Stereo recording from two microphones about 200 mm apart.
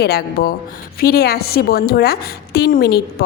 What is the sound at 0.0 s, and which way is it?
A woman's voice, 50° left (ahead or behind).